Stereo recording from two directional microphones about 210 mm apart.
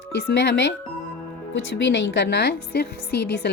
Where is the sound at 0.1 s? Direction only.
55° left (ahead or behind).